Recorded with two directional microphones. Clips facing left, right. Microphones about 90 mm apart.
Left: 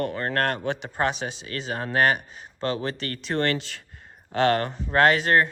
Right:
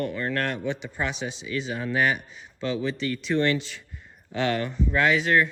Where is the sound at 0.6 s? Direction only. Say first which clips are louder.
Left 1 dB; 65° left (ahead or behind).